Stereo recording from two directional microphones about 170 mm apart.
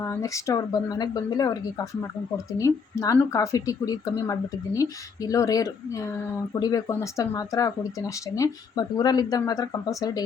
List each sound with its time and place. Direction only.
0.0 s speech: 15° left (ahead or behind)